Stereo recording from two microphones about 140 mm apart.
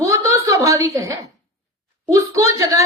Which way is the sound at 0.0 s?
20° right (ahead or behind).